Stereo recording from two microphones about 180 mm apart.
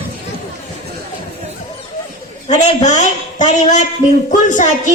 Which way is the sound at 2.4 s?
40° left (ahead or behind).